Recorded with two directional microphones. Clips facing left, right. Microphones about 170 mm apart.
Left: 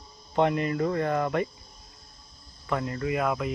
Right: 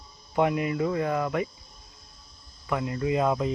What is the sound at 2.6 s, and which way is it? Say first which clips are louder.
Speech: right 1 dB; 15° right (ahead or behind).